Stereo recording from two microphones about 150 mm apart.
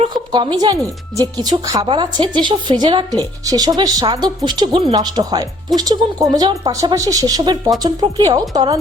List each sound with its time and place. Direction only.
0.3 s a woman's voice: 25° right (ahead or behind)